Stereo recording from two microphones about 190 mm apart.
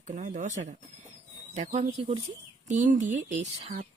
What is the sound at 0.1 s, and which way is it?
Speech, 45° right (ahead or behind).